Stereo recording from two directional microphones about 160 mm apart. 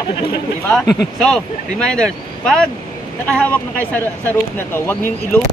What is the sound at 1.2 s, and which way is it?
Speech, 5° left (ahead or behind).